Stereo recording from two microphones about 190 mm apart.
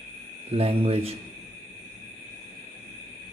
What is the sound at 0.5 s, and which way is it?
Cricket, 30° right (ahead or behind).